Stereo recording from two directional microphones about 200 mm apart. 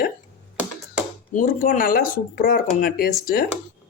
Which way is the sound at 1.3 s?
45° left (ahead or behind).